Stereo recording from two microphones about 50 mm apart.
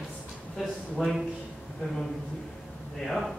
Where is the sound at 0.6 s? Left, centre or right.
Centre.